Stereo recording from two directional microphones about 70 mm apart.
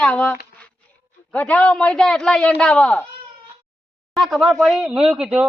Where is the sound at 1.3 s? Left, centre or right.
Left.